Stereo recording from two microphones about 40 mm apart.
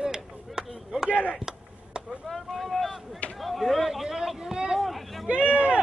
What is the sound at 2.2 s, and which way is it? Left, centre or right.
Boat, centre.